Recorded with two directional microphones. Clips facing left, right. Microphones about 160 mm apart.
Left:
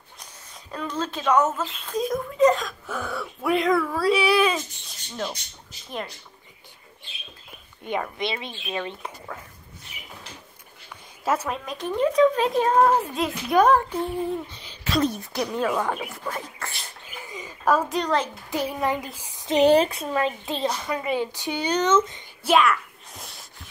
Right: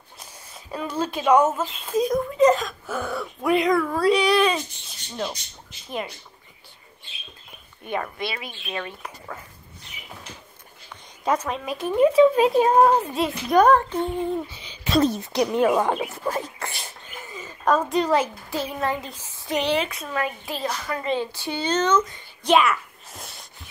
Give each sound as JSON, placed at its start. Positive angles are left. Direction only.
{"t": 0.2, "sound": "speech", "side_deg": -10}
{"t": 5.1, "sound": "speech", "side_deg": -10}
{"t": 8.2, "sound": "a woman's voice", "side_deg": 25}
{"t": 11.2, "sound": "speech", "side_deg": 5}
{"t": 14.5, "sound": "a sound", "side_deg": 0}
{"t": 15.3, "sound": "speech", "side_deg": -20}
{"t": 17.1, "sound": "a sound", "side_deg": 15}
{"t": 18.5, "sound": "speech", "side_deg": 15}
{"t": 19.0, "sound": "female singing", "side_deg": 15}
{"t": 19.6, "sound": "a woman's voice", "side_deg": 45}
{"t": 19.9, "sound": "a woman's voice", "side_deg": 30}
{"t": 22.4, "sound": "a sound", "side_deg": 0}